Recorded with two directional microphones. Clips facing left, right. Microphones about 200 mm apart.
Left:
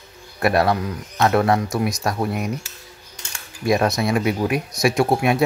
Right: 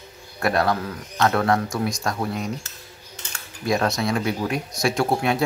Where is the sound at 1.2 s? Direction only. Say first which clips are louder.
Left 3 dB; 20° left (ahead or behind).